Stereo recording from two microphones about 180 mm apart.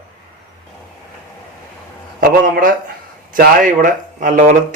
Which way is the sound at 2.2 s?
50° right (ahead or behind).